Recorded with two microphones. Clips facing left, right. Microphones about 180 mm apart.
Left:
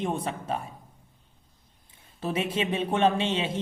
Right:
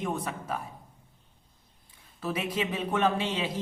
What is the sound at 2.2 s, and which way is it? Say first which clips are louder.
A woman's voice: left 3 dB; 25° left (ahead or behind).